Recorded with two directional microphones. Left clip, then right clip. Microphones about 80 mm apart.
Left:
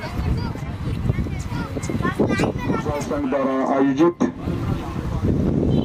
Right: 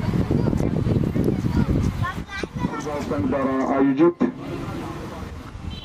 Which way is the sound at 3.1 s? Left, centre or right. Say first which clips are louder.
Left 1 dB; left.